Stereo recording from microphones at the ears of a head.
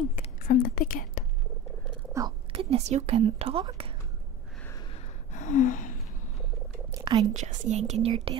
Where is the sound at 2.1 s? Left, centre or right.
Right.